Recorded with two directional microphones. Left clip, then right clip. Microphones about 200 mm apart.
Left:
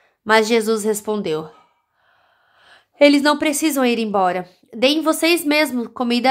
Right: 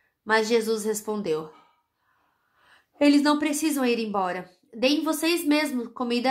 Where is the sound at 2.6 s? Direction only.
30° left (ahead or behind).